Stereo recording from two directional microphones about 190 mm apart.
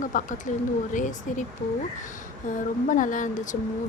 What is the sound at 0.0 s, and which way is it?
Speech, 45° left (ahead or behind).